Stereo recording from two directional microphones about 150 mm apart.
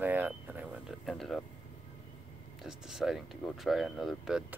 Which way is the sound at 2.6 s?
Centre (ahead or behind).